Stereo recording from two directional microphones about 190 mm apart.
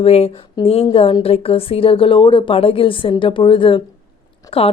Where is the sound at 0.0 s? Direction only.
30° left (ahead or behind).